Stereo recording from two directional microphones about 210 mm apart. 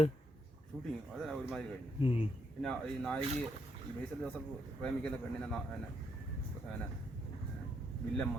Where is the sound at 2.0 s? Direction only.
25° left (ahead or behind).